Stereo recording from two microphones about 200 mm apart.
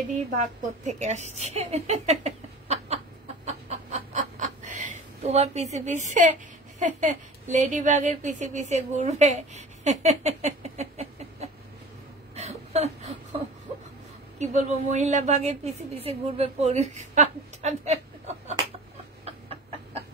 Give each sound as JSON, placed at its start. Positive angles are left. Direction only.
{"t": 0.1, "sound": "a woman's voice", "side_deg": -40}
{"t": 3.4, "sound": "chicken", "side_deg": -35}
{"t": 6.8, "sound": "speech", "side_deg": -35}
{"t": 12.4, "sound": "a sound", "side_deg": -35}
{"t": 14.4, "sound": "a woman's voice", "side_deg": -35}
{"t": 19.2, "sound": "a sound", "side_deg": -30}